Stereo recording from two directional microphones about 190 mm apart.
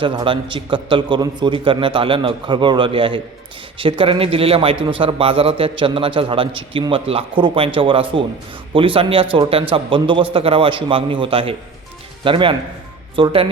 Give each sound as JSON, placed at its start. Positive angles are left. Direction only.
{"t": 0.0, "sound": "speech", "side_deg": -25}